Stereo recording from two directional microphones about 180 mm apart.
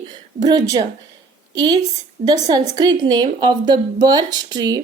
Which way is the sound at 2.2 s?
20° right (ahead or behind).